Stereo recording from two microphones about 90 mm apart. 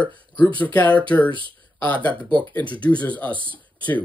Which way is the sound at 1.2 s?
65° right (ahead or behind).